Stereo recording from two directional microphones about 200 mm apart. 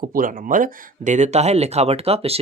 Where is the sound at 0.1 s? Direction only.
45° right (ahead or behind).